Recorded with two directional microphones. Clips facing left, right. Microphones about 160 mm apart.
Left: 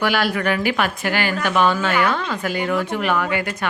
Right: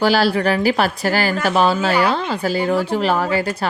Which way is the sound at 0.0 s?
30° right (ahead or behind).